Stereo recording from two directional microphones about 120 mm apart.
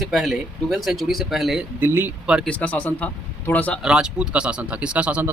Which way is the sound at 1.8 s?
20° right (ahead or behind).